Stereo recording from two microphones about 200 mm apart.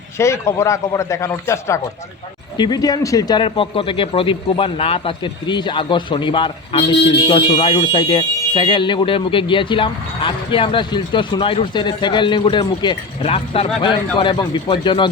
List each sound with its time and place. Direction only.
0.2 s a man's voice: 15° left (ahead or behind)